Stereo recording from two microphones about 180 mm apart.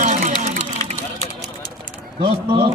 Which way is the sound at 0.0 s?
40° right (ahead or behind).